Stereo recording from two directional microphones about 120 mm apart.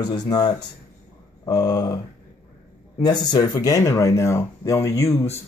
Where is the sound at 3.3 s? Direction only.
35° left (ahead or behind).